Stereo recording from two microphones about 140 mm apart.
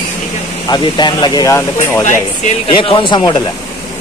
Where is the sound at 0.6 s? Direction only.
30° left (ahead or behind); by 2.0 s 15° left (ahead or behind).